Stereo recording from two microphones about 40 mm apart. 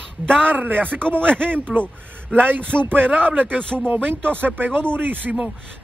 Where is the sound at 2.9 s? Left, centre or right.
Right.